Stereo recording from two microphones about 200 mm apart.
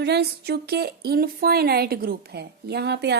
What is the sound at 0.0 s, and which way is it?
Speech, 55° right (ahead or behind).